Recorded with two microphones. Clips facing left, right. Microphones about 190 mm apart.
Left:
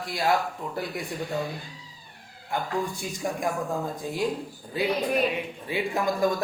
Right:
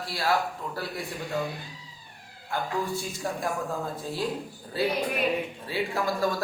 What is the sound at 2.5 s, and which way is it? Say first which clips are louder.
Speech: left 1 dB; 15° left (ahead or behind).